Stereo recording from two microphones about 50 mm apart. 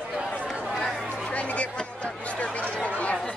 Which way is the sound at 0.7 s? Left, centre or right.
Centre.